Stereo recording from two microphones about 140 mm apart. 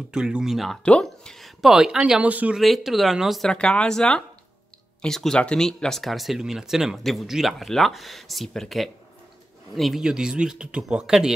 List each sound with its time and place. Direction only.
0.1 s speech: 5° right (ahead or behind)